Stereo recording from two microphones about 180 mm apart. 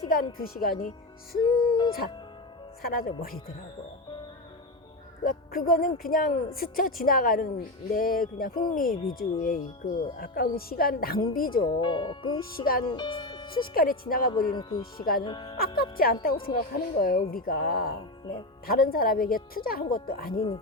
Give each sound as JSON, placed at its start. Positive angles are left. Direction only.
{"t": 0.1, "sound": "a woman's voice", "side_deg": 50}
{"t": 1.4, "sound": "speech", "side_deg": 25}
{"t": 2.8, "sound": "a woman's voice", "side_deg": 55}
{"t": 5.2, "sound": "a woman's voice", "side_deg": 55}
{"t": 11.6, "sound": "speech", "side_deg": 25}
{"t": 12.5, "sound": "a woman's voice", "side_deg": 55}
{"t": 12.8, "sound": "speech", "side_deg": 25}
{"t": 13.7, "sound": "a woman's voice", "side_deg": 55}
{"t": 14.5, "sound": "speech", "side_deg": 25}
{"t": 14.9, "sound": "a woman's voice", "side_deg": 55}
{"t": 15.2, "sound": "speech", "side_deg": 25}
{"t": 15.5, "sound": "a woman's voice", "side_deg": 55}
{"t": 16.3, "sound": "speech", "side_deg": 30}
{"t": 16.6, "sound": "a woman's voice", "side_deg": 55}